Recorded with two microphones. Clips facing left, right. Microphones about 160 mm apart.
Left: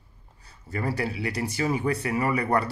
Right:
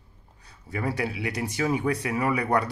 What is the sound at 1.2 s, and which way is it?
Speech, 20° right (ahead or behind).